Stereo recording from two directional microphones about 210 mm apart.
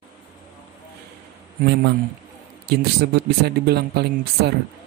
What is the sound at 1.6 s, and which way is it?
Speech, 45° right (ahead or behind).